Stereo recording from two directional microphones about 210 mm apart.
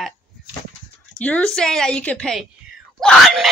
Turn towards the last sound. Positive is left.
turn(degrees=0)  # may be behind; listen again after turning